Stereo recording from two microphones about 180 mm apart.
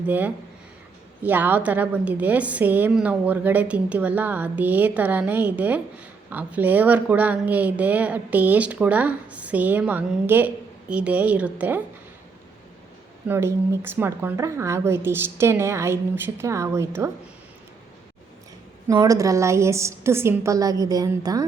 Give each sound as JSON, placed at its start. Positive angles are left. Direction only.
{"t": 0.1, "sound": "speech", "side_deg": -10}
{"t": 13.2, "sound": "speech", "side_deg": -15}
{"t": 18.9, "sound": "speech", "side_deg": -20}